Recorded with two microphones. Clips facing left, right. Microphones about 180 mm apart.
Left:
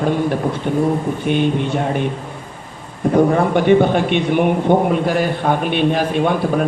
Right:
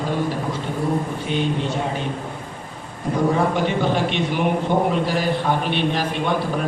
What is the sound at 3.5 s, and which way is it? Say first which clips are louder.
A man's voice: left 8 dB; 60° left (ahead or behind).